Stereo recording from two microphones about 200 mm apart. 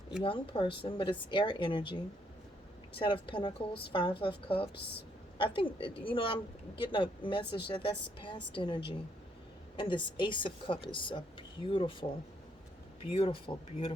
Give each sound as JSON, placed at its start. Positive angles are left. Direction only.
{"t": 0.2, "sound": "a woman's voice", "side_deg": 25}
{"t": 3.0, "sound": "a woman's voice", "side_deg": 25}